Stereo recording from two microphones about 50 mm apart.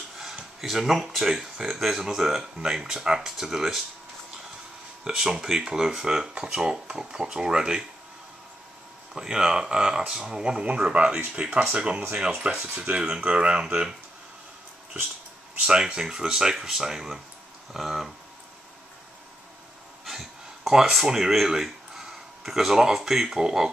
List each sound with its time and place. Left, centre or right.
0.6 s speech: centre
5.0 s speech: centre
9.1 s speech: centre
15.6 s speech: centre
20.1 s speech: centre